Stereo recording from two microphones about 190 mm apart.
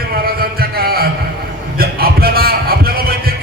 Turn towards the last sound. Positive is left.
turn(degrees=-50)  # may be behind; listen again after turning